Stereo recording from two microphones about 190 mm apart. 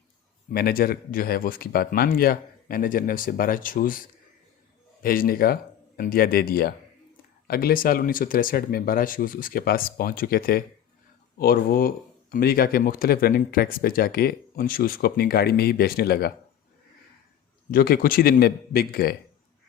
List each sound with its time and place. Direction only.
0.5 s speech: 50° left (ahead or behind)
17.7 s speech: 50° left (ahead or behind)